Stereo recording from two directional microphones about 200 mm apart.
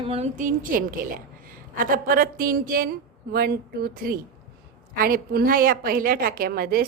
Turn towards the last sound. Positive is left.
turn(degrees=-50)  # may be behind; listen again after turning